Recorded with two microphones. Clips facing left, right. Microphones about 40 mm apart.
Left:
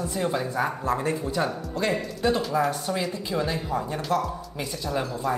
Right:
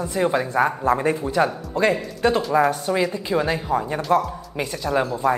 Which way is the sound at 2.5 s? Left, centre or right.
Centre.